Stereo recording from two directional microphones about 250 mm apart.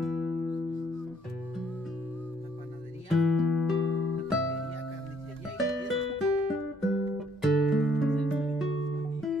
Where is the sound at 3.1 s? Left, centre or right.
Centre.